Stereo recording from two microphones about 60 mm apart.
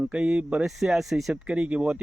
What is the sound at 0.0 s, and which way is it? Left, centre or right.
Speech, centre.